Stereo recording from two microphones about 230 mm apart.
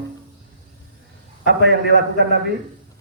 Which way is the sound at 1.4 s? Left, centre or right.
Right.